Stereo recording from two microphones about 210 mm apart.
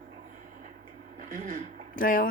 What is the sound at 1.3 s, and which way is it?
Speech, 40° right (ahead or behind).